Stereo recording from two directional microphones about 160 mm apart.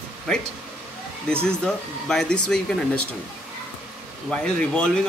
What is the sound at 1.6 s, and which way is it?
A man's voice, 5° left (ahead or behind).